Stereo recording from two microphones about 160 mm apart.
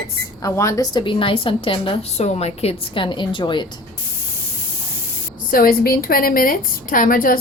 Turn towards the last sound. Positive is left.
turn(degrees=60)  # may be behind; listen again after turning